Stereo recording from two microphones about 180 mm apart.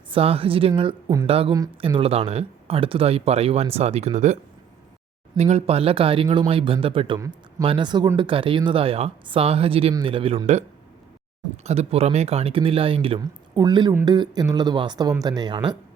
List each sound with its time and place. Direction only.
0.1 s speech: 30° right (ahead or behind)
5.4 s speech: 35° right (ahead or behind)